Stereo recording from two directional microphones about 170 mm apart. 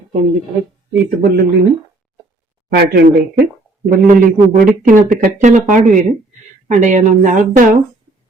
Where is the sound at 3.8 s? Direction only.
50° right (ahead or behind).